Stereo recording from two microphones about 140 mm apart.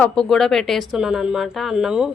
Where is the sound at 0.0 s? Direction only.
5° left (ahead or behind).